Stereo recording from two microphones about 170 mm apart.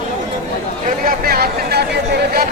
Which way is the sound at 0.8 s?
60° right (ahead or behind).